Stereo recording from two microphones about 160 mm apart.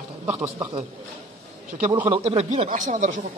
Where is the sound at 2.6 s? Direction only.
55° right (ahead or behind).